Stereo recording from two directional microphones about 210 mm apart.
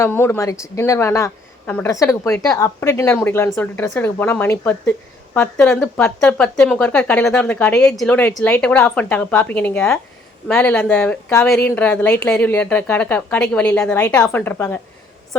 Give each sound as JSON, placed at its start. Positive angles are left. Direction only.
{"t": 0.0, "sound": "a woman's voice", "side_deg": 10}